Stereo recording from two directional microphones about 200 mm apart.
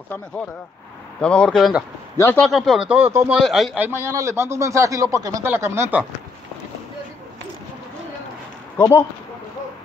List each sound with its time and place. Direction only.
1.2 s a man's voice: 5° left (ahead or behind)
8.7 s speech: 15° left (ahead or behind)